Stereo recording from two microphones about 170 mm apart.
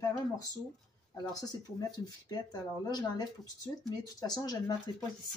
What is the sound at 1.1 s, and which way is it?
Speech, 20° left (ahead or behind).